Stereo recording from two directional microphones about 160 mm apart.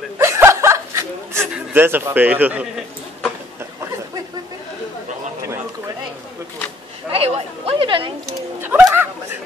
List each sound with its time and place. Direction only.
0.2 s chuckle: 15° right (ahead or behind)
7.1 s speech: 40° right (ahead or behind)
8.3 s speech: 15° right (ahead or behind)